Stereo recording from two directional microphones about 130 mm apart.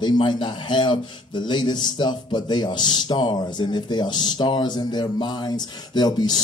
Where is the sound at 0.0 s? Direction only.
35° left (ahead or behind).